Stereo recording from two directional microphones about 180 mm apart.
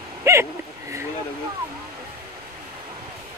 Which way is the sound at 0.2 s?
15° right (ahead or behind).